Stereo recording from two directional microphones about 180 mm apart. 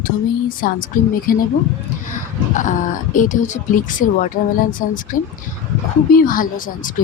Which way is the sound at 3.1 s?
45° left (ahead or behind).